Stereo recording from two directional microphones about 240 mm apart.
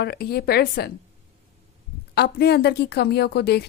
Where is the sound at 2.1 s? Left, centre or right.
Left.